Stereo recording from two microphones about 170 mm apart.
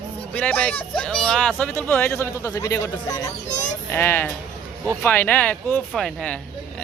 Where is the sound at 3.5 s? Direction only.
45° left (ahead or behind).